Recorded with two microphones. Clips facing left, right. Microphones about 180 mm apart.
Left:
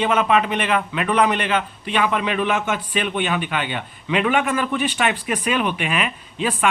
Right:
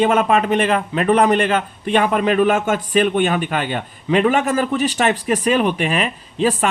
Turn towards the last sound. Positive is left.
turn(degrees=-40)  # may be behind; listen again after turning